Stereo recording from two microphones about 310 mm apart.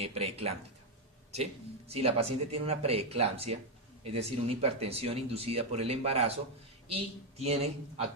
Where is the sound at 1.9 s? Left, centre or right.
Centre.